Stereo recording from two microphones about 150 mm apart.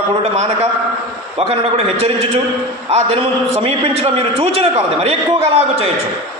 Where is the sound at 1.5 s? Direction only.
40° right (ahead or behind).